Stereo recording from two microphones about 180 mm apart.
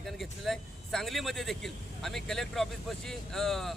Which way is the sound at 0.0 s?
Centre (ahead or behind).